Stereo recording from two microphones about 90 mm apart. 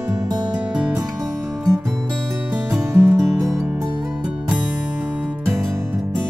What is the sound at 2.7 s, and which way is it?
Music, 30° right (ahead or behind).